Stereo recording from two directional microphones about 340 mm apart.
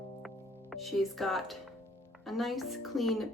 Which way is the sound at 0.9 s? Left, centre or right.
Centre.